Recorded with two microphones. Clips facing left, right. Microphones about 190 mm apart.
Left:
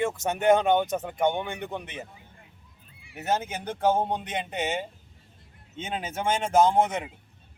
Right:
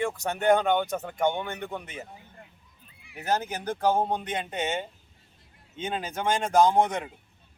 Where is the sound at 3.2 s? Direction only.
25° left (ahead or behind).